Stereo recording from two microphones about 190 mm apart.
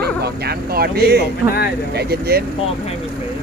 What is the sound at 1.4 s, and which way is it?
Speech, 15° right (ahead or behind).